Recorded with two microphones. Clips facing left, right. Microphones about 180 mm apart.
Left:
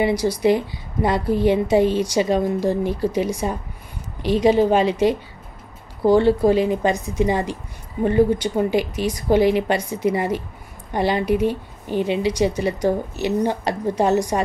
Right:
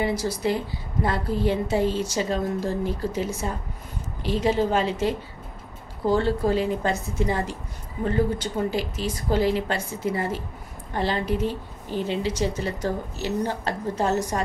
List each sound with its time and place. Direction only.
0.0 s a woman's voice: 15° left (ahead or behind)
6.1 s a woman's voice: 15° left (ahead or behind)